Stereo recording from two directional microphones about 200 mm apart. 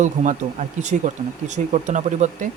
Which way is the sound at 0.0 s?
40° right (ahead or behind).